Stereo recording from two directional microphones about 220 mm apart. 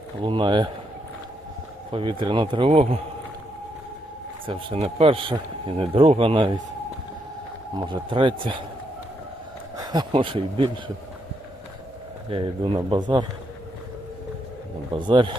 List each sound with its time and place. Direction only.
0.3 s speech: 20° right (ahead or behind)
1.9 s speech: 25° right (ahead or behind)
4.4 s speech: 25° right (ahead or behind)
7.8 s speech: 20° right (ahead or behind)
9.7 s speech: 20° right (ahead or behind)
12.3 s speech: 25° right (ahead or behind)
14.9 s speech: 20° right (ahead or behind)